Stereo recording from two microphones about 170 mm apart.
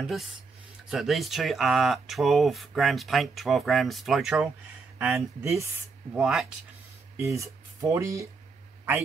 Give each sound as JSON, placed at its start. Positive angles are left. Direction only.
{"t": 0.0, "sound": "speech", "side_deg": 0}
{"t": 5.1, "sound": "speech", "side_deg": -15}
{"t": 6.1, "sound": "speech", "side_deg": -5}
{"t": 7.2, "sound": "speech", "side_deg": -20}